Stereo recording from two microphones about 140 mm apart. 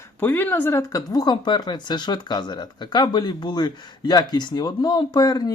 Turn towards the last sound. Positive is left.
turn(degrees=30)  # may be behind; listen again after turning